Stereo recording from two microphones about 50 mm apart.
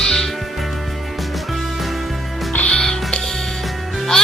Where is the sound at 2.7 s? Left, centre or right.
Centre.